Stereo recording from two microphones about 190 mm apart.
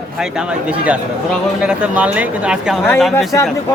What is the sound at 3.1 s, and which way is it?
Speech, 15° left (ahead or behind).